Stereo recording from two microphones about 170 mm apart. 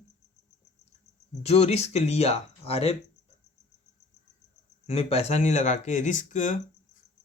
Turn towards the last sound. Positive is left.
turn(degrees=50)  # may be behind; listen again after turning